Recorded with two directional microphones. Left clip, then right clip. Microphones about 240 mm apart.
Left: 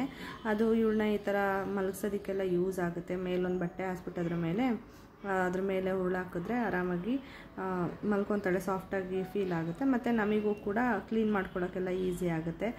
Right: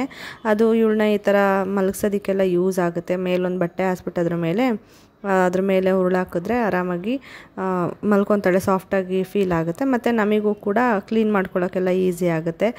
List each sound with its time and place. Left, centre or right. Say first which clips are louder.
0.0 s speech: right 12 dB; right